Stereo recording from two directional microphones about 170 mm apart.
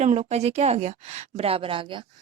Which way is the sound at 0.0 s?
40° right (ahead or behind).